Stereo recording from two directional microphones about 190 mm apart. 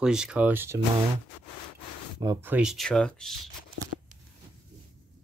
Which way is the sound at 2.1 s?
20° right (ahead or behind).